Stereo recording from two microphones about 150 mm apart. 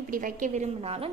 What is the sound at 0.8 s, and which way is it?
Speech, 40° right (ahead or behind).